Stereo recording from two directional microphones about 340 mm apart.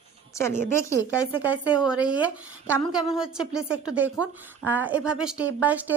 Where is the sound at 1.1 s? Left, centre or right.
Centre.